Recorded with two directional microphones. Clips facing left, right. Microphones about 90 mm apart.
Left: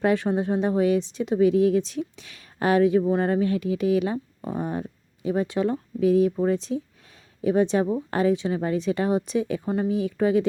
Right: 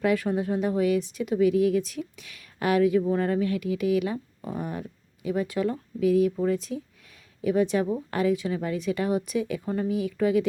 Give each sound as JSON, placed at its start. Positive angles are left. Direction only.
{"t": 0.0, "sound": "a woman's voice", "side_deg": 30}